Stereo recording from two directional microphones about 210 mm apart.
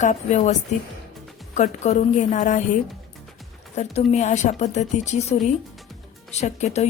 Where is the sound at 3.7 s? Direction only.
30° left (ahead or behind).